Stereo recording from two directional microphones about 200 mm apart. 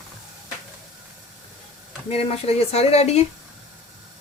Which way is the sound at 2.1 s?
30° left (ahead or behind).